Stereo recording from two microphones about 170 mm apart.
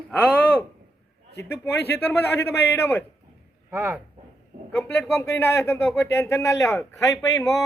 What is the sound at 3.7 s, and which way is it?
Speech, 5° right (ahead or behind).